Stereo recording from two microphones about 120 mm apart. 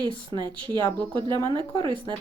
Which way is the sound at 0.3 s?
40° right (ahead or behind).